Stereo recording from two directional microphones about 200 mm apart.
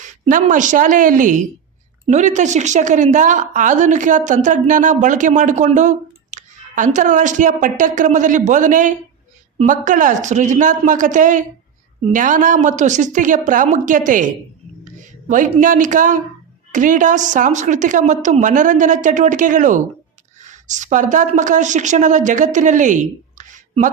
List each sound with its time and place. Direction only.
0.3 s a woman's voice: 40° right (ahead or behind)
15.3 s a woman's voice: 40° right (ahead or behind)